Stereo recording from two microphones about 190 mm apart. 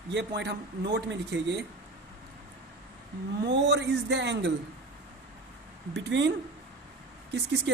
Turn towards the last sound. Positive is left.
turn(degrees=-65)  # may be behind; listen again after turning